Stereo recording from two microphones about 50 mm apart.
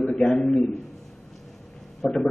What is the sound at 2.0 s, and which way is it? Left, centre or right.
Speech, centre.